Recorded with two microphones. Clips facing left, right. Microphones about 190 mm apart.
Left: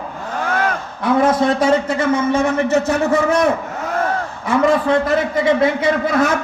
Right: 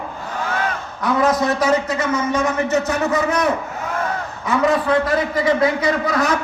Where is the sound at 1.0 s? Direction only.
25° left (ahead or behind).